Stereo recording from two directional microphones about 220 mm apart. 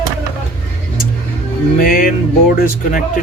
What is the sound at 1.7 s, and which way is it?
Speech, 40° left (ahead or behind).